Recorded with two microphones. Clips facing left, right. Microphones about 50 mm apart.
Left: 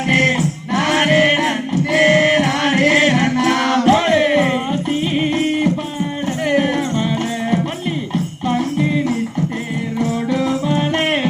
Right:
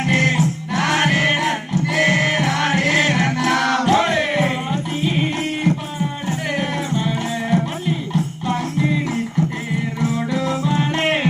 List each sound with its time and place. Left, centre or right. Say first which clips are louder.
0.1 s music: left 3 dB; left
7.5 s music: left 1 dB; left
10.7 s music: left 2 dB; left